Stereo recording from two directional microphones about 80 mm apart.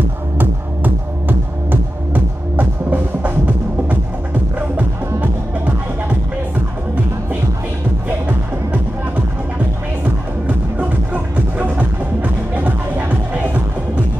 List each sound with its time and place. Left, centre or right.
1.7 s music: right
4.7 s music: right
11.5 s music: centre